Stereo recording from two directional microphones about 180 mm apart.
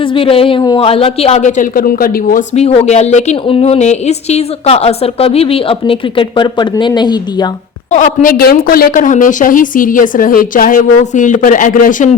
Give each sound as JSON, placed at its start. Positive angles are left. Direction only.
{"t": 0.1, "sound": "a woman's voice", "side_deg": 30}
{"t": 2.6, "sound": "a woman's voice", "side_deg": 35}
{"t": 7.9, "sound": "speech", "side_deg": 45}